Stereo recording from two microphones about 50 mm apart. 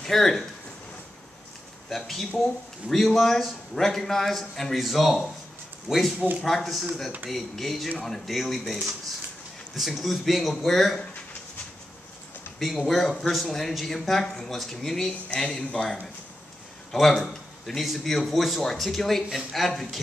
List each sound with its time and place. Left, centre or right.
0.0 s speech: centre
1.9 s speech: centre
12.5 s speech: centre
15.1 s speech: left
16.9 s speech: centre